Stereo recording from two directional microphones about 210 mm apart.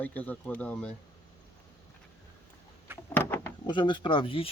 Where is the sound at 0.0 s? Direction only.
10° left (ahead or behind).